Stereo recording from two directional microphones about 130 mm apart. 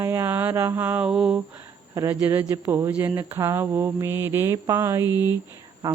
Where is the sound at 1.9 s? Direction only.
20° right (ahead or behind).